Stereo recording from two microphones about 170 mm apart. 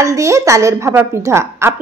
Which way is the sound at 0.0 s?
20° right (ahead or behind).